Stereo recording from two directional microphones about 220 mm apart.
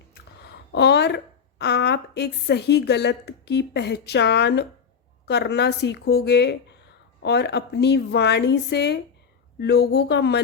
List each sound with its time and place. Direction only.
0.1 s a woman's voice: 50° left (ahead or behind)